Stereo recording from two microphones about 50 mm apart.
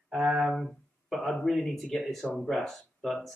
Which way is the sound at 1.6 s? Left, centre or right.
Centre.